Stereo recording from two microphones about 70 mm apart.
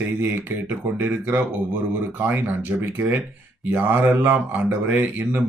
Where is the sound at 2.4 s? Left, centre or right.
Right.